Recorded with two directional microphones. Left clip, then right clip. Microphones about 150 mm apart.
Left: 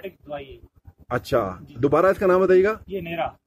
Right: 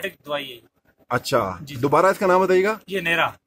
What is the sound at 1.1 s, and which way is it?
Speech, 10° right (ahead or behind).